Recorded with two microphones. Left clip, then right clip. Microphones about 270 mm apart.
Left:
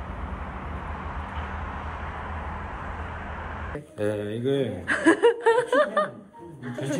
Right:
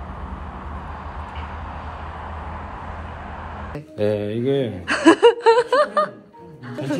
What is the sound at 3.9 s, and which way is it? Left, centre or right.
Speech, right.